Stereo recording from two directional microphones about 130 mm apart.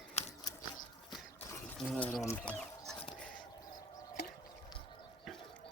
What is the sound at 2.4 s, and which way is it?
Speech, 10° left (ahead or behind).